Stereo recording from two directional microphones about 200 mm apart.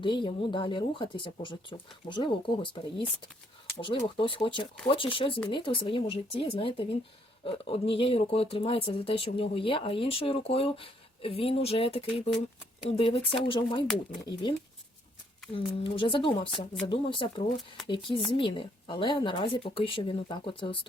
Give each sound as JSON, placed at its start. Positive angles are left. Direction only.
{"t": 0.0, "sound": "speech", "side_deg": 25}